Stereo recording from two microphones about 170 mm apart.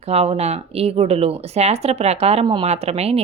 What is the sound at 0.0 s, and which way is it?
Speech, 35° right (ahead or behind).